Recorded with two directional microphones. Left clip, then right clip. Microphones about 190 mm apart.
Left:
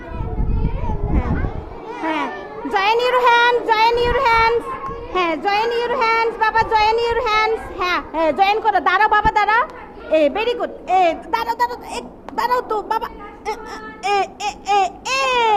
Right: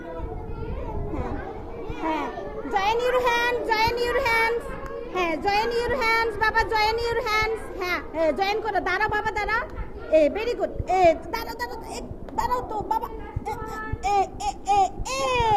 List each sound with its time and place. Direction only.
2.6 s child singing: 30° left (ahead or behind)
5.1 s a child's voice: 20° left (ahead or behind)